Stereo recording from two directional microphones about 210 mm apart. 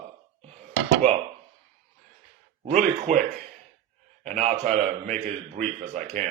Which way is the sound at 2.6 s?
35° right (ahead or behind).